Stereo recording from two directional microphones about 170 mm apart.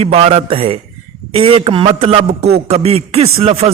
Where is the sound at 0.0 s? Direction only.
40° right (ahead or behind).